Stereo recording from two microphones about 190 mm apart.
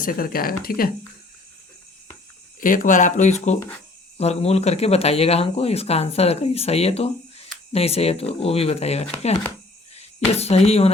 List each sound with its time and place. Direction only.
0.0 s speech: 50° left (ahead or behind)
2.6 s speech: 45° left (ahead or behind)